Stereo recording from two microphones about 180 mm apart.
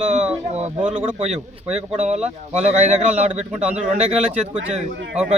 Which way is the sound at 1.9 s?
35° right (ahead or behind).